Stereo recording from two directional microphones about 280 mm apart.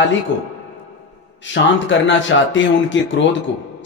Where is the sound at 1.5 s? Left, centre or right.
Left.